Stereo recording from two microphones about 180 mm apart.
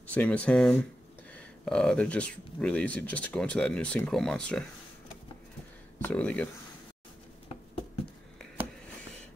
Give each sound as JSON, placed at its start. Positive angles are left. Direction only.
{"t": 0.0, "sound": "speech", "side_deg": 5}
{"t": 5.9, "sound": "speech", "side_deg": 10}